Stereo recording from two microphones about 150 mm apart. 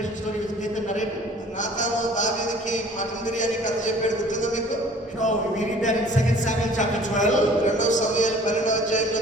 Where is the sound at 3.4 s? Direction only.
55° left (ahead or behind).